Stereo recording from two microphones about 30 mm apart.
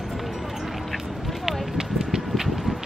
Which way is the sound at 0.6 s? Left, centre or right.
Centre.